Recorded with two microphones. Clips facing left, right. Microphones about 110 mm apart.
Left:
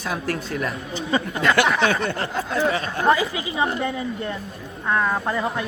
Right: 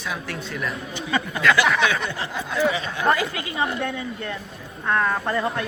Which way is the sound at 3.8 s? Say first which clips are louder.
Left 2 dB; 10° left (ahead or behind).